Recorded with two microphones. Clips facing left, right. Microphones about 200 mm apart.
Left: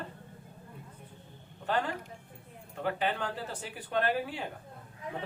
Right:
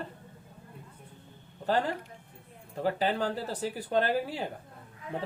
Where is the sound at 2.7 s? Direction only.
35° right (ahead or behind).